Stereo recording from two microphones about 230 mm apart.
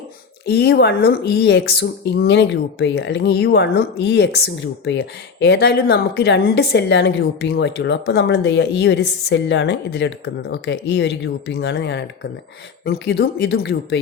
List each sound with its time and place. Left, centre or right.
0.4 s speech: left